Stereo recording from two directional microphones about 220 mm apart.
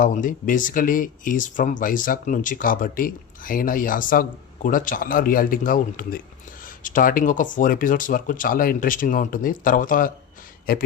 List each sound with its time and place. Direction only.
0.0 s speech: 35° left (ahead or behind)